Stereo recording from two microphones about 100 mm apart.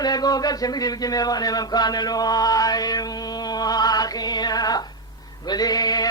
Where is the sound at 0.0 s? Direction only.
40° left (ahead or behind).